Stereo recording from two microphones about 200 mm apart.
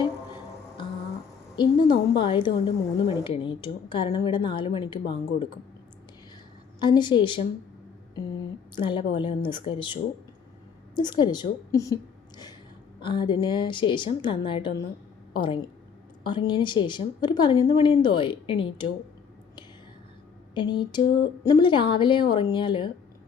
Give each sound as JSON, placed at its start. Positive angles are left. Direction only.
{"t": 1.5, "sound": "speech", "side_deg": 25}
{"t": 6.7, "sound": "speech", "side_deg": 20}
{"t": 8.7, "sound": "speech", "side_deg": 25}
{"t": 13.0, "sound": "a woman's voice", "side_deg": 25}
{"t": 20.5, "sound": "speech", "side_deg": 25}